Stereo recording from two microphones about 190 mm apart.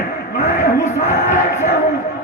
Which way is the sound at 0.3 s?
40° left (ahead or behind).